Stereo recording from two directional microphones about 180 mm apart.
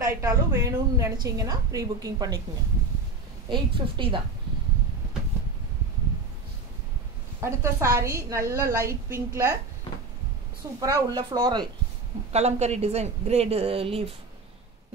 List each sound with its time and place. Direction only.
0.0 s a woman's voice: 15° right (ahead or behind)
3.4 s a woman's voice: 25° right (ahead or behind)
7.3 s a woman's voice: 15° right (ahead or behind)
10.8 s a woman's voice: 20° right (ahead or behind)
12.3 s a woman's voice: 35° right (ahead or behind)